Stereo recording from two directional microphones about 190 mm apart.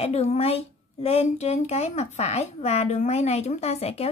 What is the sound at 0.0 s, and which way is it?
Speech, 35° left (ahead or behind).